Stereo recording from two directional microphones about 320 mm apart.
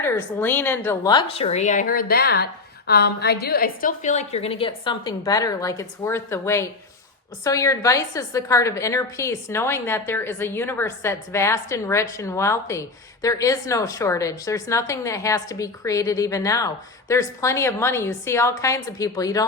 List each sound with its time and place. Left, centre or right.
0.0 s a woman's voice: centre